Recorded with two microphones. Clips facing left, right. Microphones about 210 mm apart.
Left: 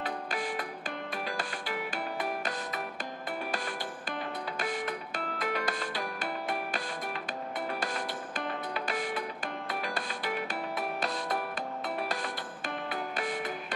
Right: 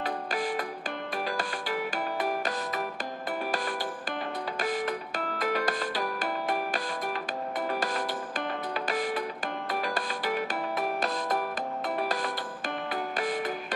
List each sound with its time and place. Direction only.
0.3 s music: 40° right (ahead or behind)
4.7 s music: 40° right (ahead or behind)
8.7 s music: 40° right (ahead or behind)
12.0 s music: 40° right (ahead or behind)